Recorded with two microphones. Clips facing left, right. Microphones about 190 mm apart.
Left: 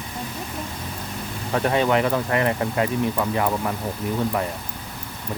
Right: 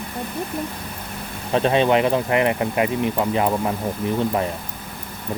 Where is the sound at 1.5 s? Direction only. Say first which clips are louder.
Right 3 dB; 20° right (ahead or behind).